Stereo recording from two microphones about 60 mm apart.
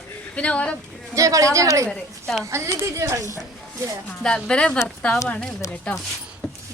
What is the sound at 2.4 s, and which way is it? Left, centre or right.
Speech, right.